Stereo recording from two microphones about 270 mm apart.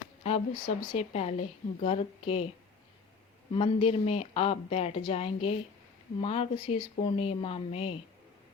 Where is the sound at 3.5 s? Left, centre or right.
Centre.